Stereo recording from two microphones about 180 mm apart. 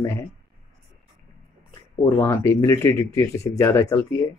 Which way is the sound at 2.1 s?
15° left (ahead or behind).